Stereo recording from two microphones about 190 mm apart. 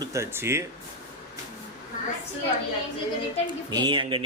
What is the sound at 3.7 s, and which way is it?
Speech, 25° right (ahead or behind).